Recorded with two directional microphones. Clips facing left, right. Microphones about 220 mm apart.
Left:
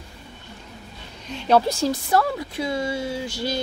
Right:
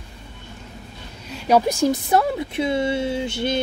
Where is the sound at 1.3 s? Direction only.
15° right (ahead or behind).